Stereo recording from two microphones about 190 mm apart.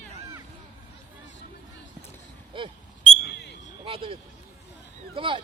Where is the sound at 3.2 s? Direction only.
60° left (ahead or behind).